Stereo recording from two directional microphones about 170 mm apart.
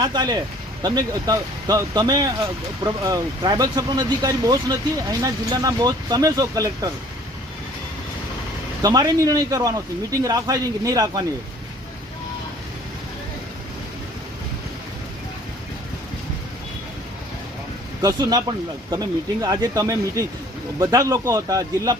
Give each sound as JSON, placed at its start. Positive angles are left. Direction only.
{"t": 0.0, "sound": "speech", "side_deg": -25}
{"t": 8.8, "sound": "speech", "side_deg": -20}
{"t": 18.0, "sound": "speech", "side_deg": -25}